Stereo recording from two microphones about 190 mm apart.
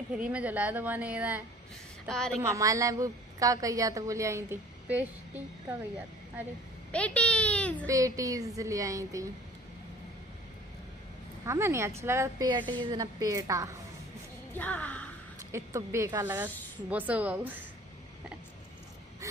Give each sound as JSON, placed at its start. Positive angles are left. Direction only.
{"t": 0.1, "sound": "a woman's voice", "side_deg": -5}
{"t": 2.0, "sound": "a woman's voice", "side_deg": 5}
{"t": 2.4, "sound": "a woman's voice", "side_deg": -15}
{"t": 6.9, "sound": "a child's voice", "side_deg": 5}
{"t": 7.8, "sound": "a woman's voice", "side_deg": -15}
{"t": 11.4, "sound": "a woman's voice", "side_deg": -15}
{"t": 14.6, "sound": "a child's voice", "side_deg": 10}
{"t": 15.5, "sound": "a woman's voice", "side_deg": -15}